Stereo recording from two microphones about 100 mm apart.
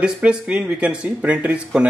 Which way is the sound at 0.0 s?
10° right (ahead or behind).